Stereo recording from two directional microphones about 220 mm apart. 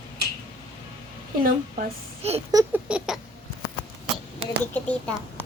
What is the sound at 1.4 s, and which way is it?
Speech, 30° right (ahead or behind).